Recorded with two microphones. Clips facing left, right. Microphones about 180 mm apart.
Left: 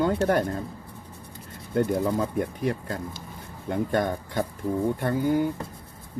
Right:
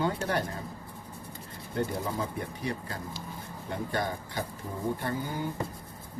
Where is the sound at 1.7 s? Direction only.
50° left (ahead or behind).